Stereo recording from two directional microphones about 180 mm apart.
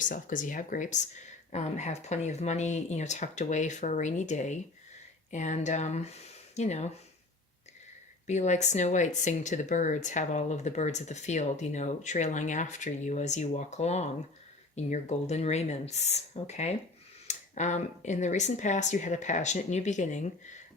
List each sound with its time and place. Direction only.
0.0 s speech: 45° left (ahead or behind)
8.3 s speech: 40° left (ahead or behind)